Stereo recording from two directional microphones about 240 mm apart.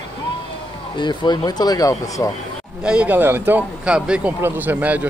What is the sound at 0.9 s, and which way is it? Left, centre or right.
Speech, centre.